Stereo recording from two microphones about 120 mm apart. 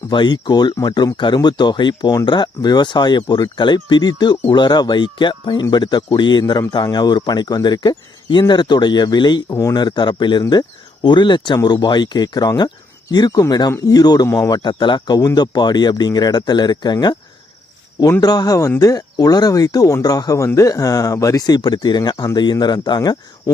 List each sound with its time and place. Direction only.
0.1 s speech: 40° left (ahead or behind)
18.2 s speech: 30° left (ahead or behind)